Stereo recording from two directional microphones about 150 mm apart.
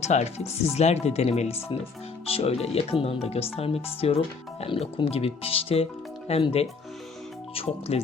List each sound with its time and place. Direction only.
0.0 s speech: 50° left (ahead or behind)